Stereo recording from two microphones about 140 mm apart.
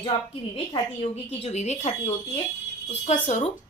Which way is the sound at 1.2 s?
55° left (ahead or behind).